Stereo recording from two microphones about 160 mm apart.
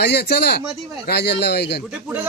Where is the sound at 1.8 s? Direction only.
5° right (ahead or behind).